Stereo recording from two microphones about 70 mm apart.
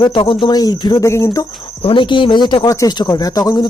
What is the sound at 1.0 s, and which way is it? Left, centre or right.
Cricket, left.